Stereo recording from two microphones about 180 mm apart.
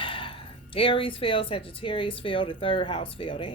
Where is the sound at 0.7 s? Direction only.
30° left (ahead or behind).